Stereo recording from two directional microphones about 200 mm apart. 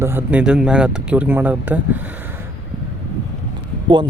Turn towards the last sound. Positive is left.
turn(degrees=-25)  # may be behind; listen again after turning